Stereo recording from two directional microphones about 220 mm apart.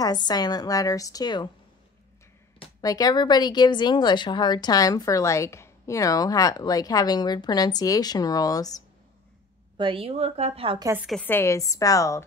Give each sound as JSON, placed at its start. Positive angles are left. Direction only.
{"t": 0.0, "sound": "speech", "side_deg": 20}
{"t": 2.6, "sound": "speech", "side_deg": 15}
{"t": 9.8, "sound": "a woman's voice", "side_deg": -25}
{"t": 10.9, "sound": "a woman's voice", "side_deg": -5}
{"t": 11.1, "sound": "speech", "side_deg": 10}